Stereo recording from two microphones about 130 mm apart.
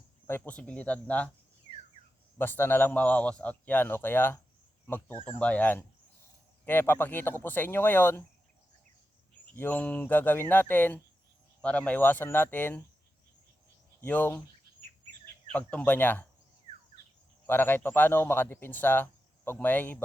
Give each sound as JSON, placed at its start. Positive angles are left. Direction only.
{"t": 0.3, "sound": "a man's voice", "side_deg": 15}
{"t": 2.4, "sound": "a man's voice", "side_deg": 15}
{"t": 9.6, "sound": "a man's voice", "side_deg": 15}
{"t": 14.0, "sound": "a man's voice", "side_deg": 15}
{"t": 15.5, "sound": "a man's voice", "side_deg": 10}
{"t": 17.4, "sound": "a man's voice", "side_deg": 15}